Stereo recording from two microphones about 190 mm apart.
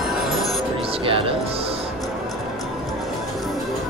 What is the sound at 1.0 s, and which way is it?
Music, 30° right (ahead or behind).